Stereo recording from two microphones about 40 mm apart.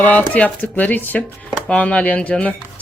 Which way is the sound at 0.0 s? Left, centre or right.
Left.